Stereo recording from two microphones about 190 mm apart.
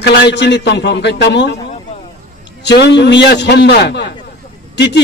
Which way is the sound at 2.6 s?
65° left (ahead or behind).